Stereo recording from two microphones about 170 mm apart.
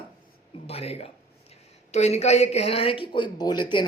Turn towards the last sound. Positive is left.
turn(degrees=25)  # may be behind; listen again after turning